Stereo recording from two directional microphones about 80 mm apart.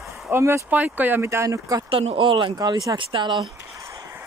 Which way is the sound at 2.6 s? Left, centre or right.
Right.